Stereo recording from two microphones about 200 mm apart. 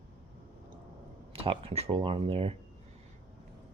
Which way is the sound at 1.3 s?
30° right (ahead or behind).